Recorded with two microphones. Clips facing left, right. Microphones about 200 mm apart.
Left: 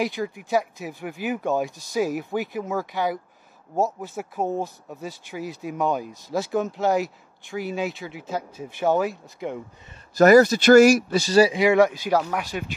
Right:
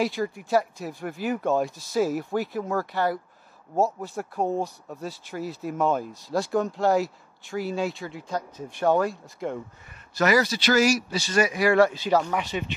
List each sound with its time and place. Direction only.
0.0 s speech: centre (ahead or behind)
10.1 s speech: 45° left (ahead or behind)
11.2 s speech: 30° left (ahead or behind); by 12.6 s 5° left (ahead or behind)